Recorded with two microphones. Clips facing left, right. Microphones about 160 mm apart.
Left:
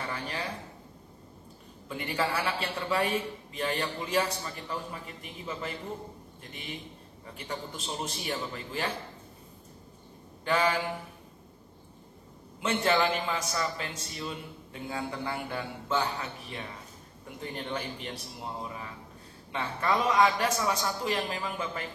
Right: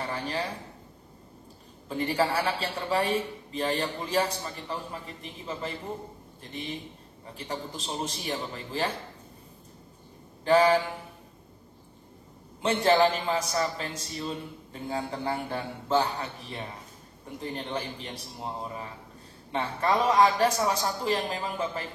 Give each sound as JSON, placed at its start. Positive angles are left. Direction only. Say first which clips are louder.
{"t": 0.3, "sound": "a man's voice", "louder": "right 4 dB", "side_deg": -35}
{"t": 1.9, "sound": "a man's voice", "louder": "right 4 dB", "side_deg": -35}
{"t": 6.5, "sound": "a man's voice", "louder": "right 5 dB", "side_deg": -35}
{"t": 10.4, "sound": "a man's voice", "louder": "right 7 dB", "side_deg": -35}
{"t": 12.6, "sound": "a man's voice", "louder": "right 4 dB", "side_deg": -35}